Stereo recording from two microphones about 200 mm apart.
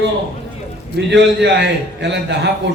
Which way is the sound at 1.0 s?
60° right (ahead or behind).